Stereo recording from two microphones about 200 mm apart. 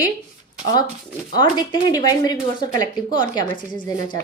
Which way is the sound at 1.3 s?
20° left (ahead or behind).